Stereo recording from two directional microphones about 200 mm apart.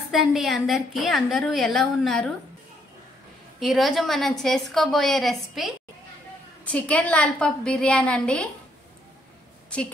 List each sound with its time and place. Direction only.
0.1 s a woman's voice: centre (ahead or behind)
3.5 s a woman's voice: centre (ahead or behind)